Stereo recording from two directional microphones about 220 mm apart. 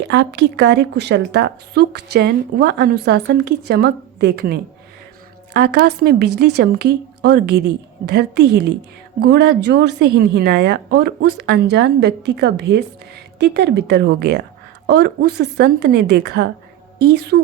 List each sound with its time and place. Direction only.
0.1 s a woman's voice: 50° right (ahead or behind)
5.5 s a woman's voice: 45° right (ahead or behind)